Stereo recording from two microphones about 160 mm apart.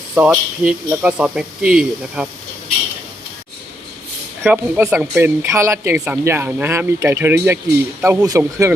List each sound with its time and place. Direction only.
0.1 s speech: 5° right (ahead or behind)
4.4 s speech: 15° right (ahead or behind)